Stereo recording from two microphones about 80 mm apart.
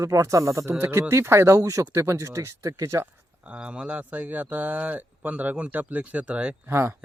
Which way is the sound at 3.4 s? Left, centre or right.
Centre.